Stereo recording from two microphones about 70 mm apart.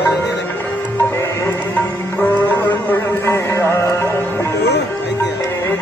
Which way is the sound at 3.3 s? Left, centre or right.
Left.